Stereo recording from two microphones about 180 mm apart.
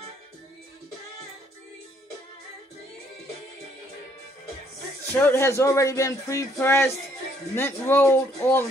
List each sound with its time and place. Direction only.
5.1 s speech: 15° left (ahead or behind)